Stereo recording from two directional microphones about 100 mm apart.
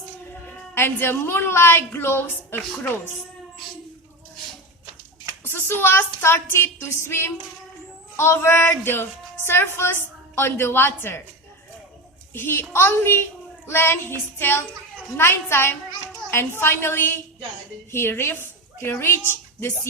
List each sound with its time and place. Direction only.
0.7 s speech: 20° left (ahead or behind)
5.5 s speech: 20° left (ahead or behind)
12.3 s a woman's voice: 25° left (ahead or behind)